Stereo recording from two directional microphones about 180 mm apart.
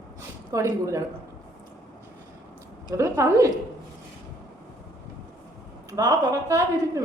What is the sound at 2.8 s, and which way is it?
Speech, 15° right (ahead or behind).